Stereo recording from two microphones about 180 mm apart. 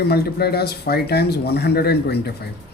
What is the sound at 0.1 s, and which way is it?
Speech, 60° left (ahead or behind).